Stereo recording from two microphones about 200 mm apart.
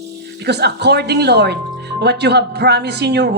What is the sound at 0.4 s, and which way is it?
Speech, 55° right (ahead or behind).